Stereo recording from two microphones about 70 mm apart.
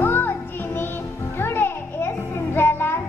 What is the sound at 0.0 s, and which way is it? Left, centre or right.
Music, left.